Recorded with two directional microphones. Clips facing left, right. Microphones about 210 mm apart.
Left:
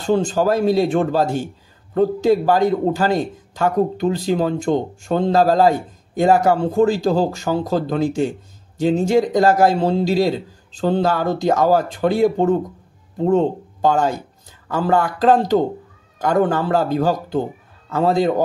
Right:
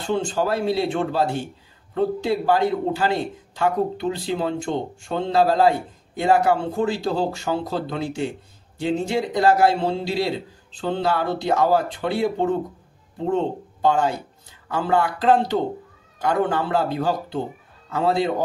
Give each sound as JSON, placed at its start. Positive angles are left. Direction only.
{"t": 0.0, "sound": "a man's voice", "side_deg": 40}